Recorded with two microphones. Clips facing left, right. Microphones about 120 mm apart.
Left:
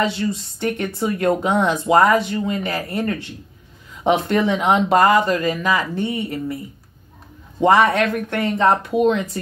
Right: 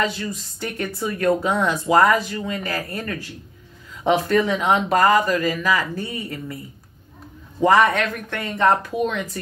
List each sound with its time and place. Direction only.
0.0 s speech: 25° left (ahead or behind)
7.6 s speech: 25° left (ahead or behind)